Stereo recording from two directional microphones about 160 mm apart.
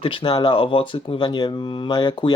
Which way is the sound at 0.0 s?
35° left (ahead or behind).